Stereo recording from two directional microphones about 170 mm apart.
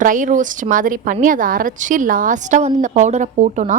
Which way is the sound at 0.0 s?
50° right (ahead or behind).